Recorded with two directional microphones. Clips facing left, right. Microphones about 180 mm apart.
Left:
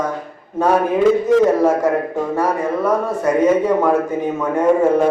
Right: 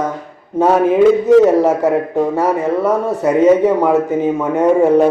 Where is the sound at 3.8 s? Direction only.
20° right (ahead or behind).